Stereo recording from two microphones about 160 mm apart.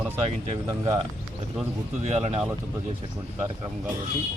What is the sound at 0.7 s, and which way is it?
Speech, 25° right (ahead or behind).